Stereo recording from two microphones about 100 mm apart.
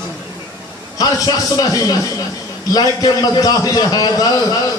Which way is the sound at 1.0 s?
40° left (ahead or behind).